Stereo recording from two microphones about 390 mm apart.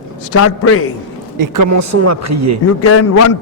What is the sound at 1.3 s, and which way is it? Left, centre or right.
Speech, right.